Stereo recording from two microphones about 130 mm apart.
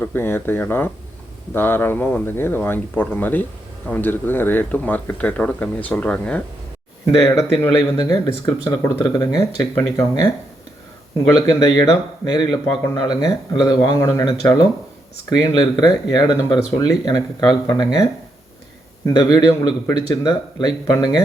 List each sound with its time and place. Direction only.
0.0 s speech: 15° left (ahead or behind)
7.3 s speech: 25° left (ahead or behind)
11.3 s speech: 35° left (ahead or behind)
19.0 s speech: 30° left (ahead or behind)